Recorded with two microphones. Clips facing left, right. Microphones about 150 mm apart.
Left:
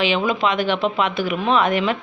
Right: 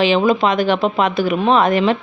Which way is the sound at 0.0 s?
35° right (ahead or behind).